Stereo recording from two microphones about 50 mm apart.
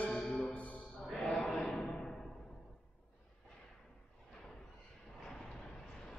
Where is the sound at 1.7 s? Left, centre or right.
Centre.